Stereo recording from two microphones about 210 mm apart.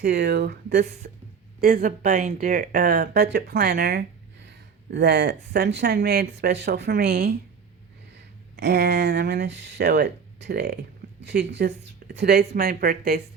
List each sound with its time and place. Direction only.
0.0 s speech: 55° right (ahead or behind)
2.0 s speech: 40° right (ahead or behind)
8.5 s speech: 55° right (ahead or behind)